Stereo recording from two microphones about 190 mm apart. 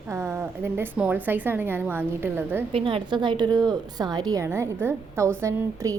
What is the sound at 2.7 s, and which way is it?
A woman's voice, 25° right (ahead or behind).